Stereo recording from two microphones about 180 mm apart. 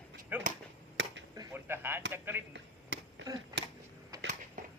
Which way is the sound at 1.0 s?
80° right.